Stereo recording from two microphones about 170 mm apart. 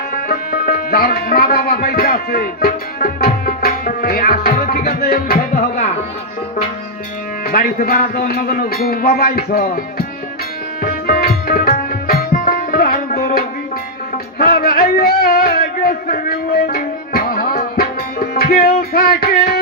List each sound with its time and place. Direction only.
0.1 s music: 55° left (ahead or behind)
7.4 s speech: 60° left (ahead or behind)
10.8 s tabla: 60° left (ahead or behind)
14.3 s a sound: 60° left (ahead or behind)
18.8 s music: 60° left (ahead or behind)